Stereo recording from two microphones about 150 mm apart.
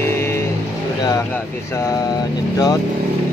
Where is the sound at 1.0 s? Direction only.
25° left (ahead or behind).